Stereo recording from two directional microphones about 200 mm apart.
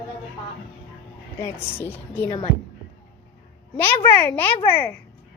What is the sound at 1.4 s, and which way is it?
Speech, 10° left (ahead or behind).